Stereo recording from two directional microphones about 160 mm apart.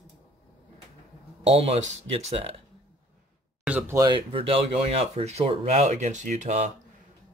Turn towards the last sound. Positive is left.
turn(degrees=-50)  # may be behind; listen again after turning